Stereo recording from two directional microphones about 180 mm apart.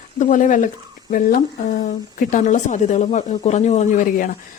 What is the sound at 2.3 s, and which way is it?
A man's voice, 45° left (ahead or behind).